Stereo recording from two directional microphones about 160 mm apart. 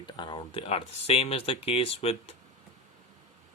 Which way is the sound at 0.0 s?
30° left (ahead or behind).